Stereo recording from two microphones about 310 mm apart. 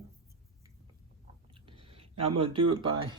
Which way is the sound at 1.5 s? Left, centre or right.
Centre.